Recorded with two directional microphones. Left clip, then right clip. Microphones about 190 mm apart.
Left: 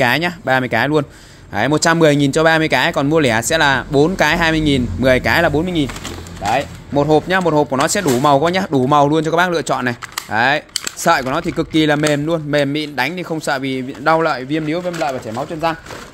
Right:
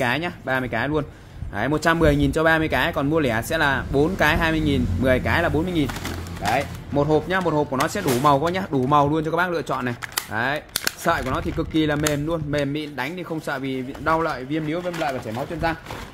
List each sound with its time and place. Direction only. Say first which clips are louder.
0.0 s a man's voice: left 8 dB; 45° left (ahead or behind)